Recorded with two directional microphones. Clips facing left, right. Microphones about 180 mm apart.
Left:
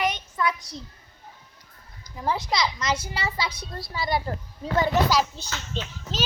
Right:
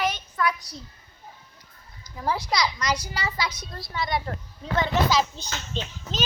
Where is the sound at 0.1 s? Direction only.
20° left (ahead or behind).